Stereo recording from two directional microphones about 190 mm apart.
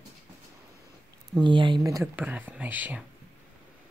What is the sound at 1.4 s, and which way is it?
Speech, 25° right (ahead or behind).